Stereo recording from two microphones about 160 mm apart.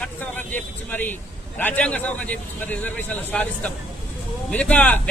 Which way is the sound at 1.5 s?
10° left (ahead or behind).